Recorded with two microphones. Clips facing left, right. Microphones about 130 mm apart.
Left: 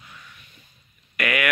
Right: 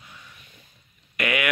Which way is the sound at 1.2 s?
20° right (ahead or behind).